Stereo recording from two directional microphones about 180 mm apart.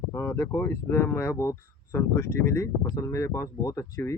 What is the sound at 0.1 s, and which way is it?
Speech, 15° left (ahead or behind).